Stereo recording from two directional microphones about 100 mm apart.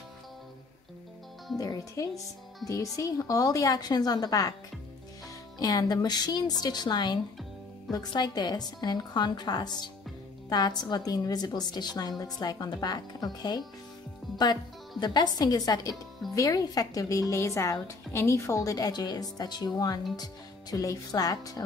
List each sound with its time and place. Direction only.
1.6 s a woman's voice: 35° left (ahead or behind)
5.6 s a woman's voice: 40° left (ahead or behind)